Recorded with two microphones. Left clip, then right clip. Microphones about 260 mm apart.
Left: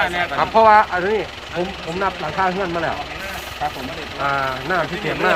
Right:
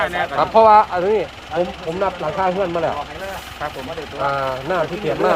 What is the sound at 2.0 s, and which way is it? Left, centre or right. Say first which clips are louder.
Speech: even; right.